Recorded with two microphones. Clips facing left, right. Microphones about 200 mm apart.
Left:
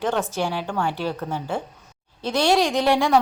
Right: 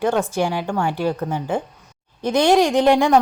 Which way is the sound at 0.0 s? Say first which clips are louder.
Right 4 dB; 15° right (ahead or behind).